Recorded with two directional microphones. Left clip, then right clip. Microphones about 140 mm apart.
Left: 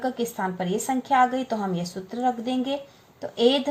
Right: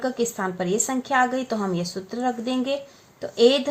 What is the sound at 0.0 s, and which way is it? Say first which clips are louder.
Speech: right 2 dB; 40° right (ahead or behind).